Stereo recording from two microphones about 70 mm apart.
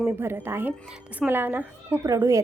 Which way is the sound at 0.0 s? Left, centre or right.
Right.